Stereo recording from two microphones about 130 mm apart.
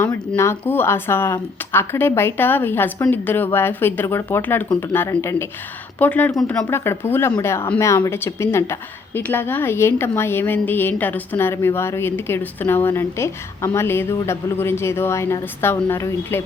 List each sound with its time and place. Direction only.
0.0 s a woman's voice: 20° left (ahead or behind)